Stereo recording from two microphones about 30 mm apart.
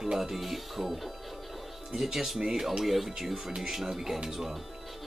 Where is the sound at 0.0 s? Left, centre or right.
Centre.